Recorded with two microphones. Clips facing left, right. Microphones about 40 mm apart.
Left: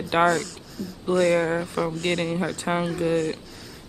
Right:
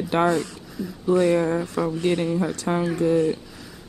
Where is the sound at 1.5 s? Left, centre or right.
Centre.